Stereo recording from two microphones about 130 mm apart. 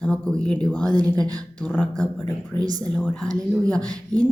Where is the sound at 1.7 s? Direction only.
10° left (ahead or behind).